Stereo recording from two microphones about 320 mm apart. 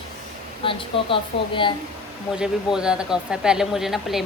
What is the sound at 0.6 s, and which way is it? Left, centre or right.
Speech, centre.